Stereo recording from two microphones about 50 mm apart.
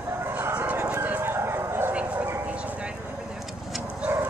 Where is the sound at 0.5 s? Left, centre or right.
Right.